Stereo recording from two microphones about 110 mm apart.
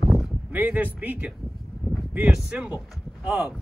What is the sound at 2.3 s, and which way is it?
Speech, 10° right (ahead or behind).